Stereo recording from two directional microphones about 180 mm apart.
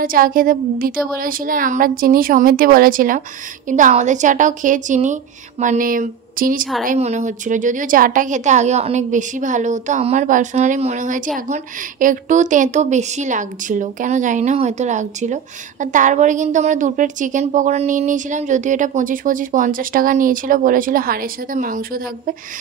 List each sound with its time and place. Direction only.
0.0 s a woman's voice: 50° right (ahead or behind)